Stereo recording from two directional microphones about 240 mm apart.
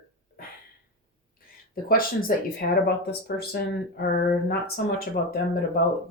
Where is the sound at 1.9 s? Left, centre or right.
Left.